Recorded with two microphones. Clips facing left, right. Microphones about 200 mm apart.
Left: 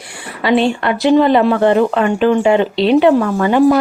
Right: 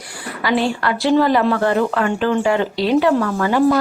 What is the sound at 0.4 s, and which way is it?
Speech, 25° left (ahead or behind).